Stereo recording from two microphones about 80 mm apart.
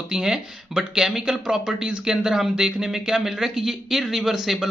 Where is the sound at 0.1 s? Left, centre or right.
Centre.